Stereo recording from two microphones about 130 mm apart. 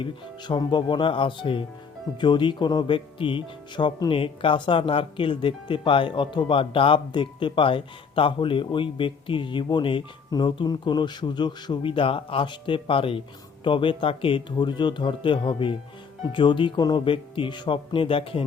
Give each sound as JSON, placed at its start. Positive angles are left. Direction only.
{"t": 0.0, "sound": "speech", "side_deg": 35}